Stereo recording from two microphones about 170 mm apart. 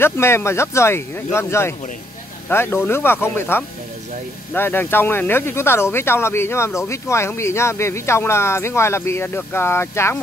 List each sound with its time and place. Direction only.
0.0 s speech: 15° left (ahead or behind)